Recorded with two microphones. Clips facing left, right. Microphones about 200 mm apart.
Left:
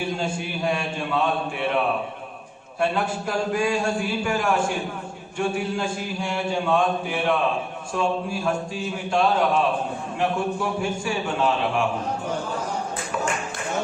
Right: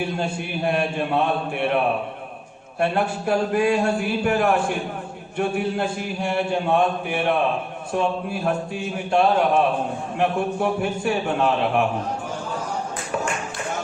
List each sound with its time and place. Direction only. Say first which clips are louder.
0.0 s a man's voice: right 1 dB; 60° right (ahead or behind)
2.8 s a man's voice: right 2 dB; 60° right (ahead or behind)